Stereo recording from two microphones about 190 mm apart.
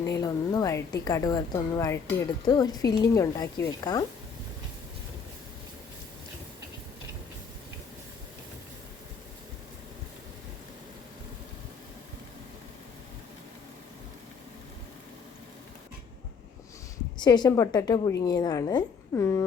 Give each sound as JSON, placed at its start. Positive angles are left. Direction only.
{"t": 0.2, "sound": "speech", "side_deg": 20}
{"t": 17.2, "sound": "speech", "side_deg": 20}